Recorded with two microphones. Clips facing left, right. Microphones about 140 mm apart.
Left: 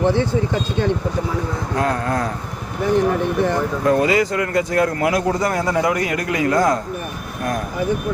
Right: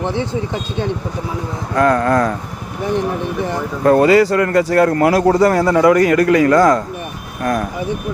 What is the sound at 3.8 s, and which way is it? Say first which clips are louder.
Speech: right 7 dB; 50° right (ahead or behind).